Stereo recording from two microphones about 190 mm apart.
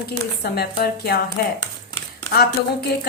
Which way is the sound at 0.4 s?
55° left (ahead or behind).